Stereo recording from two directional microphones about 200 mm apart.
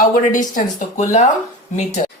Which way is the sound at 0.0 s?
40° left (ahead or behind).